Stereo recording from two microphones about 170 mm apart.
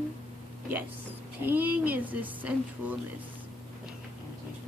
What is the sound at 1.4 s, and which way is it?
A woman's voice, 10° right (ahead or behind).